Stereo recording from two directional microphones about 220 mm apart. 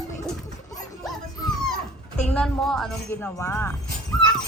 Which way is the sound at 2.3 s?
5° left (ahead or behind).